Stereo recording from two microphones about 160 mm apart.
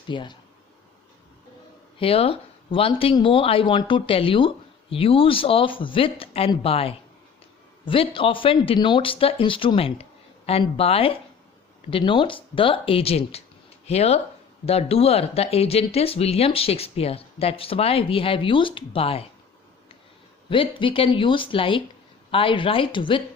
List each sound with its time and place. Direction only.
0.1 s speech: 30° left (ahead or behind)
2.0 s speech: 35° left (ahead or behind)
20.5 s speech: 30° left (ahead or behind)